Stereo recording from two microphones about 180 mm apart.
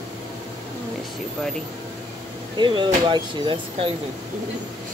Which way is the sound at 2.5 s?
25° right (ahead or behind).